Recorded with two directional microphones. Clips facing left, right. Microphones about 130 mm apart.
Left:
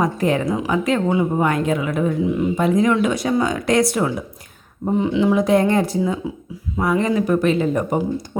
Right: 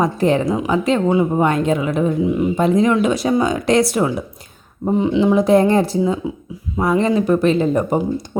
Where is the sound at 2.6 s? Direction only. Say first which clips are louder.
Right 2 dB; 25° right (ahead or behind).